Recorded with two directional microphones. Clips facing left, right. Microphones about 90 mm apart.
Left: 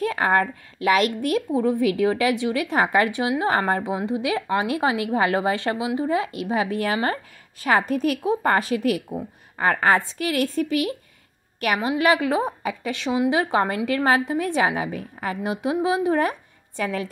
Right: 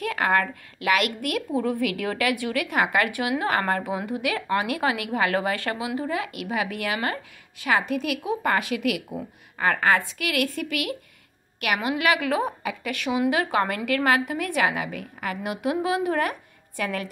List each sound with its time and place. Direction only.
0.0 s a woman's voice: 30° left (ahead or behind)